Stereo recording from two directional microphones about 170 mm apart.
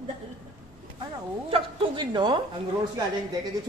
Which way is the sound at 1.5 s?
25° right (ahead or behind).